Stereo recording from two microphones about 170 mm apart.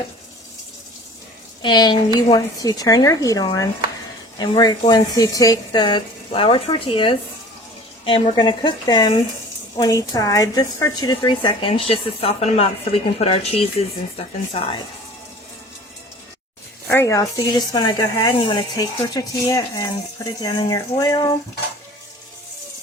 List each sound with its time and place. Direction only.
1.6 s speech: 25° left (ahead or behind)
16.9 s speech: 15° left (ahead or behind)